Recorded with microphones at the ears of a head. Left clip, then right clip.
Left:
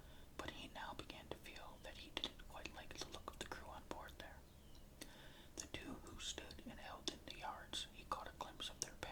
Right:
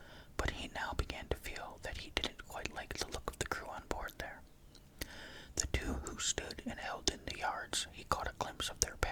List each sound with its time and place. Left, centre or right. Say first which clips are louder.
0.3 s whispering: right 11 dB; right